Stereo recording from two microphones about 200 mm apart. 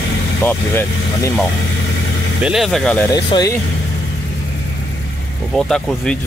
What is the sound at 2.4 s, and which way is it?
Speech, centre (ahead or behind).